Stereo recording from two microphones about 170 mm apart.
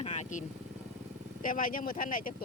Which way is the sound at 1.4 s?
55° left (ahead or behind).